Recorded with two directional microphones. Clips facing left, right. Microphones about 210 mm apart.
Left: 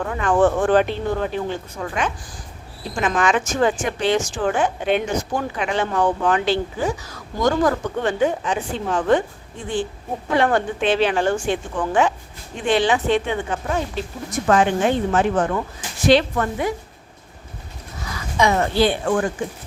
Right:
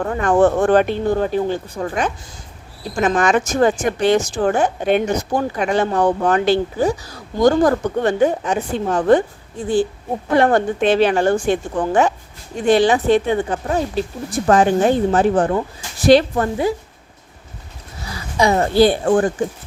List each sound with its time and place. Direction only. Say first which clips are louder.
0.0 s speech: right 3 dB; 40° right (ahead or behind)
7.0 s speech: right 6 dB; 35° right (ahead or behind)
10.3 s speech: right 4 dB; 45° right (ahead or behind)
18.0 s speech: right 2 dB; 30° right (ahead or behind)